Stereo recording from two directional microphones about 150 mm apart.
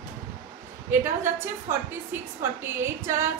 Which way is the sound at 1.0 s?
15° right (ahead or behind).